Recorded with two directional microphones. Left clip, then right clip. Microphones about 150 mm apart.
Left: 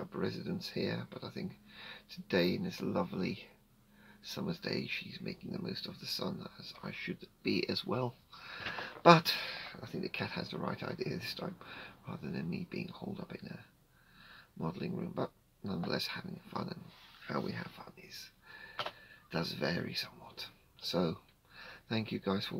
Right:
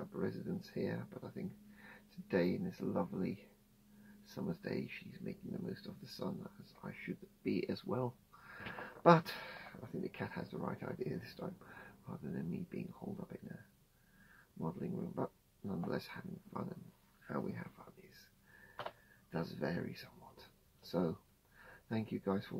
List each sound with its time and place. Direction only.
0.1 s speech: 15° left (ahead or behind)
14.6 s speech: 15° left (ahead or behind)
19.3 s speech: 15° left (ahead or behind)